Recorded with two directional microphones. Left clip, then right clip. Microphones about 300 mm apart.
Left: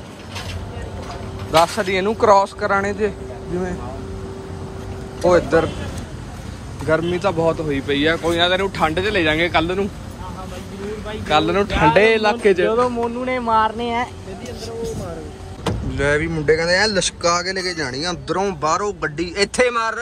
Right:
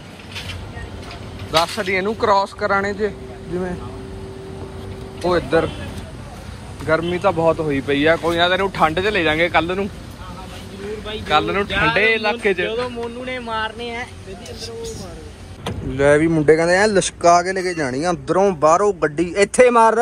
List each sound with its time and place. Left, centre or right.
1.5 s speech: centre
5.2 s speech: centre
6.9 s speech: centre
11.1 s speech: centre
13.0 s speech: left
16.0 s speech: centre